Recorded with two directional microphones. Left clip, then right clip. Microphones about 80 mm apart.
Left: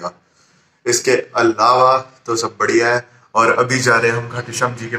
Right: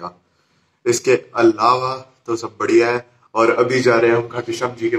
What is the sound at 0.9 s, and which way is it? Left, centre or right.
Speech, right.